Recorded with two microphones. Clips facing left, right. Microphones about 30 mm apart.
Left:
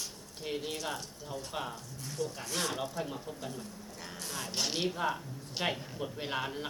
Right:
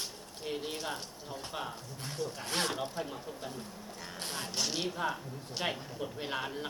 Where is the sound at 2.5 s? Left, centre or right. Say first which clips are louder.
Right 4 dB; right.